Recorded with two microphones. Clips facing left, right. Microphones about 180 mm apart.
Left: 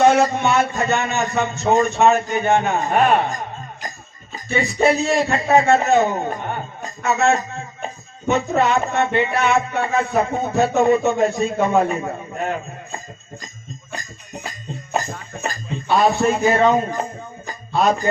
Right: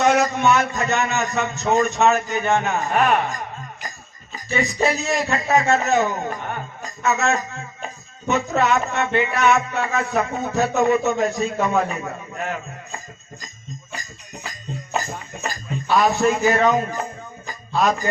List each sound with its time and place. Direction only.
0.0 s a man's voice: 30° left (ahead or behind)
4.5 s a man's voice: 30° left (ahead or behind)
15.7 s a man's voice: 25° left (ahead or behind)